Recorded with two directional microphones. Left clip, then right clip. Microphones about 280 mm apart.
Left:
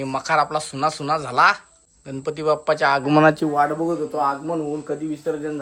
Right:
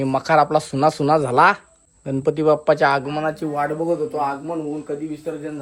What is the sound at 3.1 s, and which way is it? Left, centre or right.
Speech, left.